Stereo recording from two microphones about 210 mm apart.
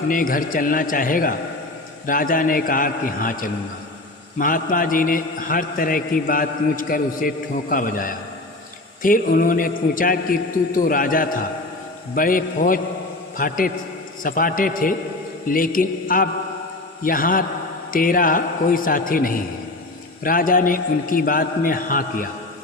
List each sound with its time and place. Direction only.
0.1 s a man's voice: 40° left (ahead or behind)